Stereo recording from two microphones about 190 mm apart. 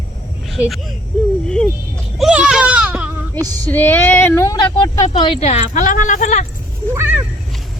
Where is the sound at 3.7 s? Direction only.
10° left (ahead or behind); by 5.4 s 25° left (ahead or behind).